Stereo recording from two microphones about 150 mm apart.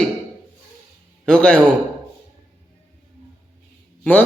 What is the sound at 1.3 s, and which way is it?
Speech, 10° left (ahead or behind).